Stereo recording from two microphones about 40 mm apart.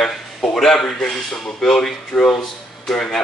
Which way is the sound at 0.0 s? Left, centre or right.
Centre.